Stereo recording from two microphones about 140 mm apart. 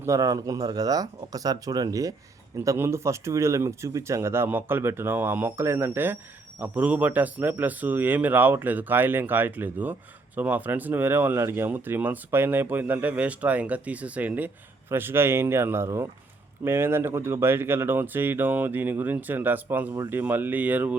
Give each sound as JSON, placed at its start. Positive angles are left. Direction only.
{"t": 0.0, "sound": "speech", "side_deg": -25}